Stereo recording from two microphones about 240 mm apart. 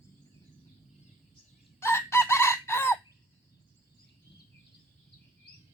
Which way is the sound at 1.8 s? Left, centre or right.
Centre.